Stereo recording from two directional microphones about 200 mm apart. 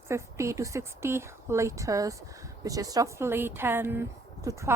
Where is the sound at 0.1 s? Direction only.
15° right (ahead or behind).